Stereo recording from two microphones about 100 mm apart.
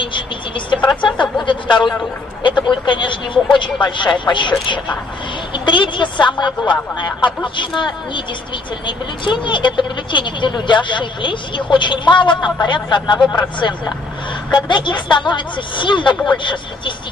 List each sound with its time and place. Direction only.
1.0 s speech: 50° left (ahead or behind)